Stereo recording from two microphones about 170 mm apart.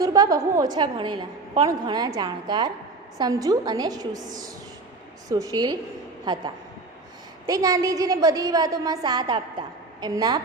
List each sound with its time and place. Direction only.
0.0 s a woman's voice: 20° right (ahead or behind)